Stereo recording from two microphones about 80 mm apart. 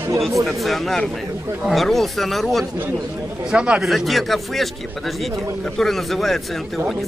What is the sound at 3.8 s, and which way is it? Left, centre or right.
Speech, centre.